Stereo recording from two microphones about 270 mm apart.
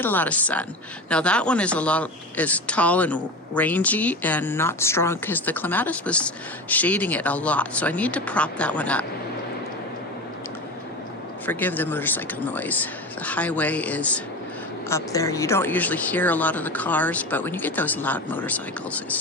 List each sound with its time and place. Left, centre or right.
0.0 s speech: centre
11.4 s speech: centre